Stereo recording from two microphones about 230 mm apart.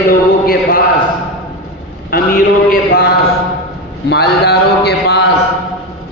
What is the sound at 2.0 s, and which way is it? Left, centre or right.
A man's voice, left.